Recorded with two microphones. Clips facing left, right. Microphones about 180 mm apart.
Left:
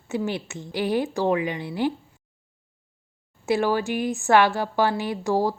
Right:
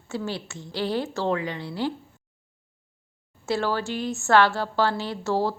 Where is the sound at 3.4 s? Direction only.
15° left (ahead or behind).